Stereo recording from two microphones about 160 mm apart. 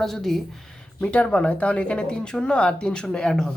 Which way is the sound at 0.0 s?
Centre (ahead or behind).